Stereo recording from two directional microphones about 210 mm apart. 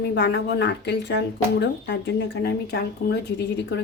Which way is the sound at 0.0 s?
55° left (ahead or behind).